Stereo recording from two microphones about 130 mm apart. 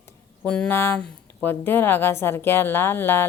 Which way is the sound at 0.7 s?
20° left (ahead or behind).